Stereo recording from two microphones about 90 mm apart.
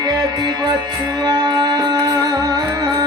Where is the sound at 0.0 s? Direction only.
50° right (ahead or behind).